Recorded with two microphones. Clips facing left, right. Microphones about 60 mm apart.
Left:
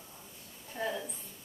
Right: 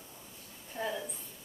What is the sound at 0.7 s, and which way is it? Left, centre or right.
Speech, centre.